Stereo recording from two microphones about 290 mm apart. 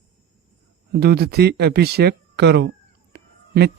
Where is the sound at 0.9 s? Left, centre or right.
Right.